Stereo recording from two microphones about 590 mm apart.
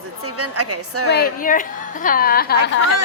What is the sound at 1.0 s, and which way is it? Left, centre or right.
A woman's voice, centre.